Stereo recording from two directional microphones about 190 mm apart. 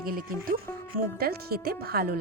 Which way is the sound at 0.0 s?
50° right (ahead or behind).